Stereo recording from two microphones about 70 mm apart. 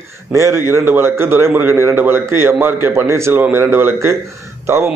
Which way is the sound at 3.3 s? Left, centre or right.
Right.